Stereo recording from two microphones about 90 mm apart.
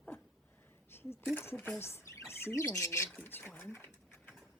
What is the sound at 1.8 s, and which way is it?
Speech, 30° left (ahead or behind).